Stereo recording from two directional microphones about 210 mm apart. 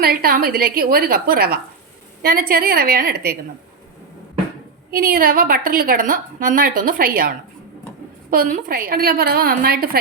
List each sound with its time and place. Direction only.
0.0 s a woman's voice: 45° right (ahead or behind)
4.9 s a woman's voice: 45° right (ahead or behind)